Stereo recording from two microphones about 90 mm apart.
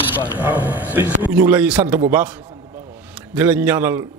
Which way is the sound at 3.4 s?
20° right (ahead or behind).